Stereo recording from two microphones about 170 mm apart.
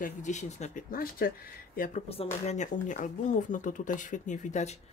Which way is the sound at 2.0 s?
40° left (ahead or behind).